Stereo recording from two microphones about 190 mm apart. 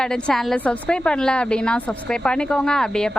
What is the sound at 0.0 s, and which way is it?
A woman's voice, 5° left (ahead or behind).